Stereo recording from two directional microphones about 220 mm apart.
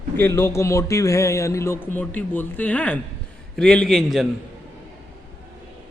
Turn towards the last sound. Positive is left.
turn(degrees=0)  # may be behind; listen again after turning